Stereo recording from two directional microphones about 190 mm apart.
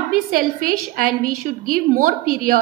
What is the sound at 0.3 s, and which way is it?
A woman's voice, 50° right (ahead or behind).